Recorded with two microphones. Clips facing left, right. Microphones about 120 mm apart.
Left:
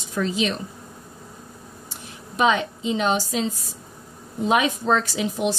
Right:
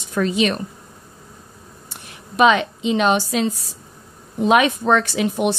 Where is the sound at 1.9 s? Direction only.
80° right.